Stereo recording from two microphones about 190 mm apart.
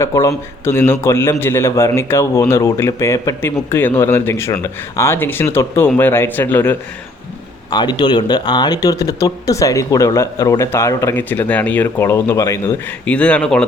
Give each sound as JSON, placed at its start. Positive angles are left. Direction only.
{"t": 0.0, "sound": "speech", "side_deg": 15}
{"t": 7.7, "sound": "speech", "side_deg": 20}